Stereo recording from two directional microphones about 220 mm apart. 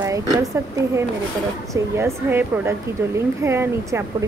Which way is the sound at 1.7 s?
10° right (ahead or behind).